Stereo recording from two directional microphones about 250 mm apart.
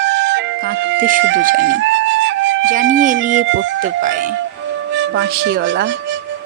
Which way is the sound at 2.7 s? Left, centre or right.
Right.